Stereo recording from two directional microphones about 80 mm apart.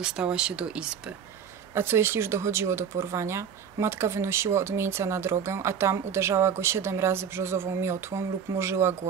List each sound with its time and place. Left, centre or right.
0.0 s speech: centre
1.7 s speech: right